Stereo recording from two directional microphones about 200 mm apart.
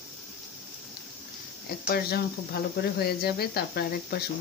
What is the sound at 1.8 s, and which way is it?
Speech, 50° left (ahead or behind).